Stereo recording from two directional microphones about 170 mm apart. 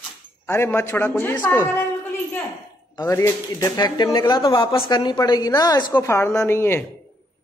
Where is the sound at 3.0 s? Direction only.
20° left (ahead or behind).